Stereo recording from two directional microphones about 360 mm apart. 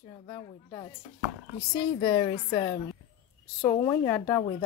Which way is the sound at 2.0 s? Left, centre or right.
Centre.